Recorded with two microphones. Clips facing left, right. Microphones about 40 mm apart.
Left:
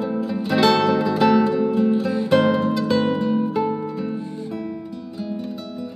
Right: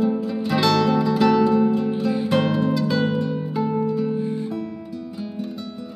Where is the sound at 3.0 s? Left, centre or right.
Centre.